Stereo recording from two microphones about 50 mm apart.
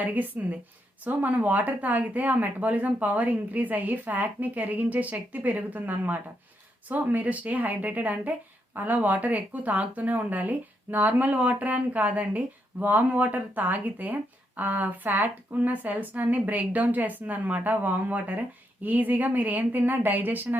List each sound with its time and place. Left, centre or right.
0.0 s speech: right